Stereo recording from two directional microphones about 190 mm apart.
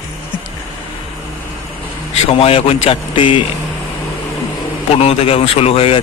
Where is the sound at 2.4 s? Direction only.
30° left (ahead or behind).